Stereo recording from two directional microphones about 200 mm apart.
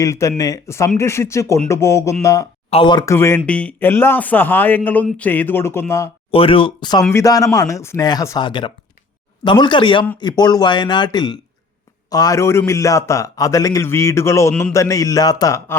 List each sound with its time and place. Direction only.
0.0 s a man's voice: 15° left (ahead or behind)
3.2 s a man's voice: 10° left (ahead or behind)
6.3 s a man's voice: 25° left (ahead or behind)